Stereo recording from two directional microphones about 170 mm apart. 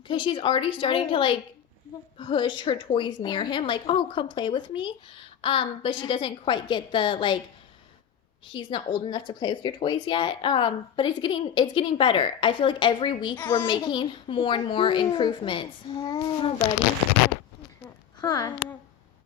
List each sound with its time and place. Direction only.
0.1 s speech: 30° left (ahead or behind)
8.4 s speech: 30° left (ahead or behind)
13.3 s a woman's voice: 10° left (ahead or behind)
13.7 s speech: 25° left (ahead or behind)
18.2 s speech: 25° left (ahead or behind)